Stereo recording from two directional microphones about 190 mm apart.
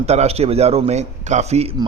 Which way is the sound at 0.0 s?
35° right (ahead or behind).